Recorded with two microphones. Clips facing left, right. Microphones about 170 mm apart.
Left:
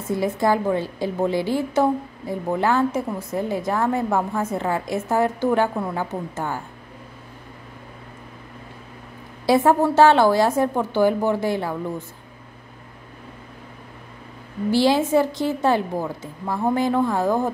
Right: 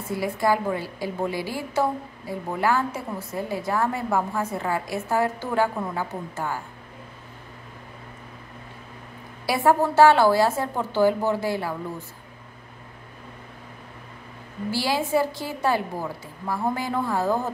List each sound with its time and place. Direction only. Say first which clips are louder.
0.1 s a woman's voice: left 3 dB; 20° left (ahead or behind)
9.5 s a woman's voice: left 4 dB; 20° left (ahead or behind)
14.7 s a woman's voice: left 6 dB; 20° left (ahead or behind)